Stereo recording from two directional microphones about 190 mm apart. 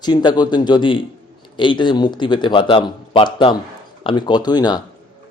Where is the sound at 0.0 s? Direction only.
25° left (ahead or behind).